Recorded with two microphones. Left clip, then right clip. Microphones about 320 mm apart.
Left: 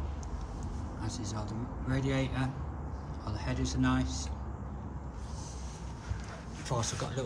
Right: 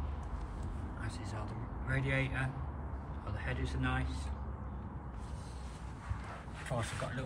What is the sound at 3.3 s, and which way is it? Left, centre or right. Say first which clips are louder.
Vehicle: left 4 dB; centre.